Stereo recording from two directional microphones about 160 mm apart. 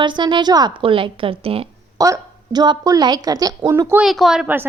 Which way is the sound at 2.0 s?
25° right (ahead or behind).